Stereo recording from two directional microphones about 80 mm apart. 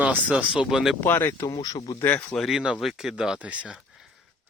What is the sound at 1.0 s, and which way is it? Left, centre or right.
Speech, left.